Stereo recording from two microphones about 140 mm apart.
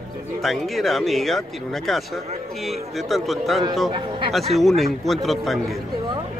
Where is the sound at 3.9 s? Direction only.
35° right (ahead or behind).